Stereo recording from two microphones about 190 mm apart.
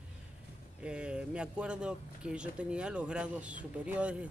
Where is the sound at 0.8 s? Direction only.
5° right (ahead or behind).